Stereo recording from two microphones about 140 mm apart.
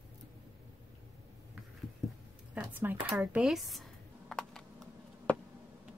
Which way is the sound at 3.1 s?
Centre (ahead or behind).